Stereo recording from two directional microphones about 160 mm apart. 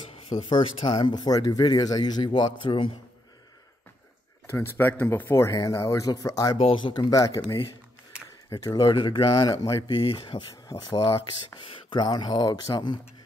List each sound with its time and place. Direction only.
0.1 s a man's voice: 35° left (ahead or behind)
4.5 s speech: 15° left (ahead or behind)
8.5 s speech: 25° left (ahead or behind)